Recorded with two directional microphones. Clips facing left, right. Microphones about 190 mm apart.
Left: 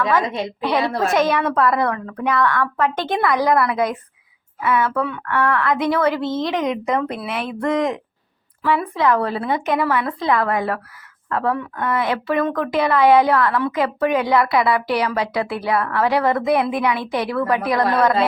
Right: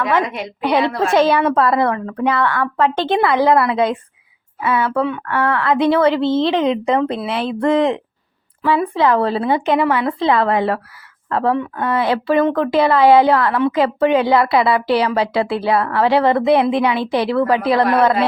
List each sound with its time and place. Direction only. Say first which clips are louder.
0.6 s speech: right 4 dB; 30° right (ahead or behind)